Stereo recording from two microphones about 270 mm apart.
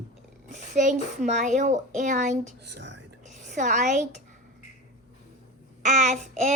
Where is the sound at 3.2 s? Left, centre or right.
Right.